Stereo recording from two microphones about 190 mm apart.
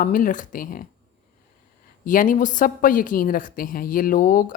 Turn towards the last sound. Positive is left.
turn(degrees=45)  # may be behind; listen again after turning